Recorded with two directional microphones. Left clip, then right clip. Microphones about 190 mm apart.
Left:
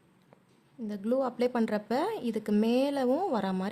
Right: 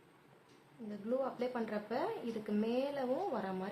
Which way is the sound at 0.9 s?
65° left (ahead or behind).